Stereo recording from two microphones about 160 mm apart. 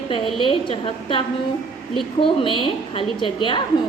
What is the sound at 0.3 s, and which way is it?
Speech, 35° left (ahead or behind).